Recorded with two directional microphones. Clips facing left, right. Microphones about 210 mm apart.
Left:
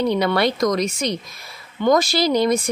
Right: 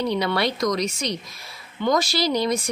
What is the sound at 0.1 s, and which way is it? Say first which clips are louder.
Speech: left 4 dB; 50° left (ahead or behind).